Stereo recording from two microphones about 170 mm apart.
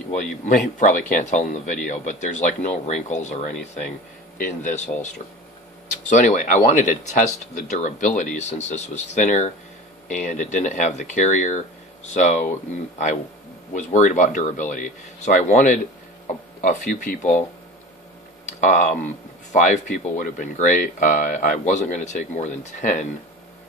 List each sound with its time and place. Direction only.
0.5 s speech: 50° left (ahead or behind)
6.0 s speech: 50° left (ahead or behind)
13.7 s speech: 45° left (ahead or behind)